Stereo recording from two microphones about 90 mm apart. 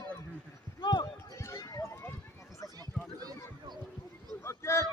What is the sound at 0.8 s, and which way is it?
Basketball bounce, 55° left (ahead or behind).